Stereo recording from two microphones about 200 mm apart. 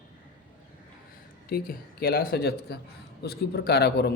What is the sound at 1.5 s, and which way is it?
A man's voice, 50° left (ahead or behind).